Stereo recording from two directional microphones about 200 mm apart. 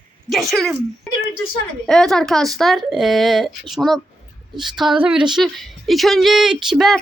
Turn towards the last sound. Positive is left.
turn(degrees=0)  # may be behind; listen again after turning